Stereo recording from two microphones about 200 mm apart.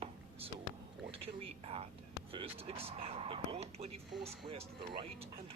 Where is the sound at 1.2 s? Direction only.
30° right (ahead or behind).